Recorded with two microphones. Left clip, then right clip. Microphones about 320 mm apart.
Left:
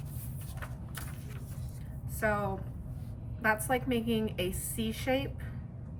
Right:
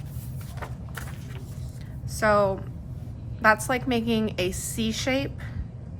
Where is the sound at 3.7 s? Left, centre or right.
Centre.